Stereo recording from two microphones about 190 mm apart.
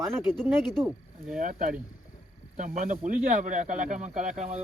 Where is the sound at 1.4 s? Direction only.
45° right (ahead or behind).